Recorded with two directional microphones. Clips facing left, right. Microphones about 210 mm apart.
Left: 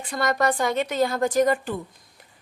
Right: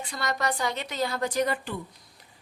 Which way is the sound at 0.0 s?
50° left (ahead or behind).